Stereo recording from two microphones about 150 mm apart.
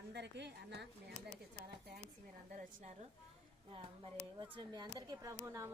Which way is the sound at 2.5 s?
50° right (ahead or behind).